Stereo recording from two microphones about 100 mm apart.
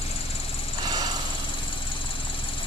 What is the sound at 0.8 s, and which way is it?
Vehicle, 45° right (ahead or behind).